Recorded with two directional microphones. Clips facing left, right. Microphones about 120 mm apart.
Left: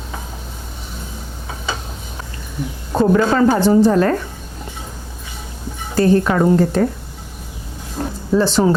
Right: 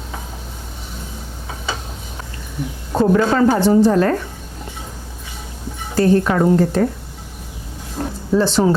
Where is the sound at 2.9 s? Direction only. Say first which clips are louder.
Left 1 dB; 30° left (ahead or behind).